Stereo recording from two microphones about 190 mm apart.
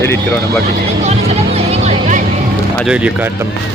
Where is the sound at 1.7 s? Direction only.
35° right (ahead or behind).